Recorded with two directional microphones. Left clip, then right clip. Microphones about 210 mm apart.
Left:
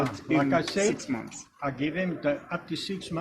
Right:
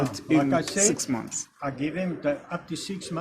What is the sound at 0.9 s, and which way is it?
Speech, 50° right (ahead or behind).